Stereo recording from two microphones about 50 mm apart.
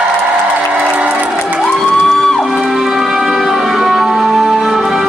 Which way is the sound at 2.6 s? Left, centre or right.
Centre.